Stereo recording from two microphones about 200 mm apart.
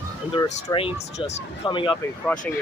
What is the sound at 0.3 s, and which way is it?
Speech, 25° left (ahead or behind).